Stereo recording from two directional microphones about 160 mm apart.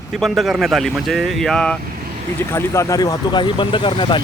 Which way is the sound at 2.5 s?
20° left (ahead or behind).